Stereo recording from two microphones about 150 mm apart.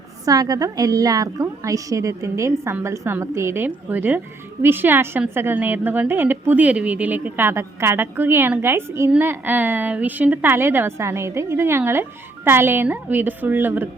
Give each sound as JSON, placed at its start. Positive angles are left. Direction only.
{"t": 0.3, "sound": "a woman's voice", "side_deg": -25}